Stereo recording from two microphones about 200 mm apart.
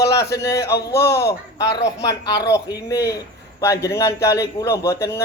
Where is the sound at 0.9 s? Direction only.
15° left (ahead or behind).